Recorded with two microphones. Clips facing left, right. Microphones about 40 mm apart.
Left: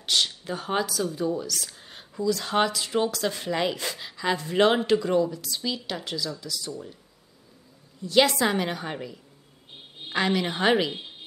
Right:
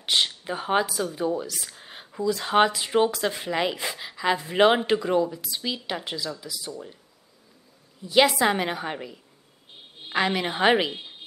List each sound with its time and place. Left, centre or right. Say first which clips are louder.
0.0 s speech: right 1 dB; right
8.0 s a woman's voice: right 1 dB; centre